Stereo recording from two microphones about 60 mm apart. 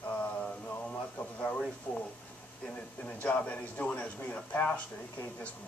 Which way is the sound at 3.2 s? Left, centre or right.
Left.